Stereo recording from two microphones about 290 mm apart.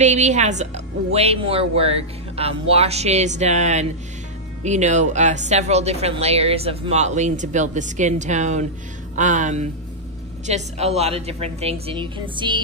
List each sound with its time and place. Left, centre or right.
0.0 s speech: right